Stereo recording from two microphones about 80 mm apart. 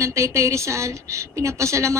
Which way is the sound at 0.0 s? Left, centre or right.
Right.